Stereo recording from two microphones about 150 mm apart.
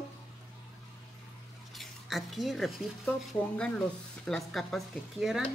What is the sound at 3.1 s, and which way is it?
Speech, 5° left (ahead or behind).